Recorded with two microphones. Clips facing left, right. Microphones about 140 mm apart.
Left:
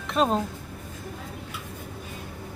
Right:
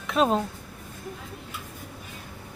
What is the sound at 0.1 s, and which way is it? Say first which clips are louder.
Speech: right 1 dB; centre (ahead or behind).